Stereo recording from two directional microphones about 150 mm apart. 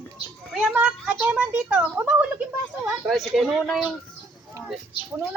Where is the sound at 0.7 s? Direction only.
10° right (ahead or behind).